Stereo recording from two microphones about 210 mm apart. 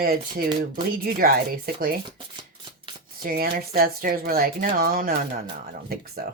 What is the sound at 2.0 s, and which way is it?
Shuffling cards, 25° right (ahead or behind).